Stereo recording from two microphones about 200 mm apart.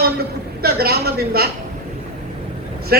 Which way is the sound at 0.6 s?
50° right (ahead or behind).